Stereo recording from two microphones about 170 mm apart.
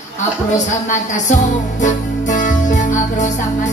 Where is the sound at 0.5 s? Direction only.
45° left (ahead or behind).